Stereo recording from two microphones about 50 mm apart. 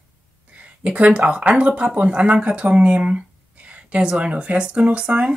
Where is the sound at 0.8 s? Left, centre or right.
Right.